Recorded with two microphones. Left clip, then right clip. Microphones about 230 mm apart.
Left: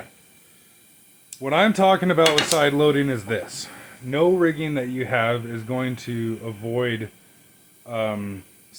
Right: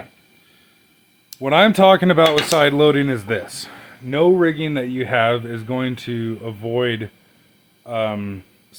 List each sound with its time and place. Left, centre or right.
1.4 s speech: right